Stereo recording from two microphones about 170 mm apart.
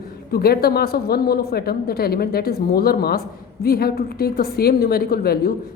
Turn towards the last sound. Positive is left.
turn(degrees=65)  # may be behind; listen again after turning